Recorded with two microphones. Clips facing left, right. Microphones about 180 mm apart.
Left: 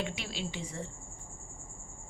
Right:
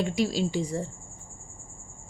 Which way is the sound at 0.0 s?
40° right (ahead or behind).